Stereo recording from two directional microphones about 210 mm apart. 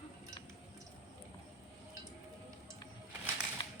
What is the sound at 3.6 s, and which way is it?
Tap, 20° left (ahead or behind).